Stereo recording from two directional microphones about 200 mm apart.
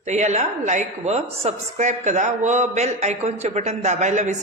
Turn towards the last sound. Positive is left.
turn(degrees=-35)  # may be behind; listen again after turning